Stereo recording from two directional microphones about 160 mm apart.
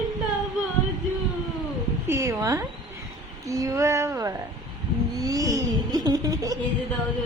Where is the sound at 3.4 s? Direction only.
20° right (ahead or behind).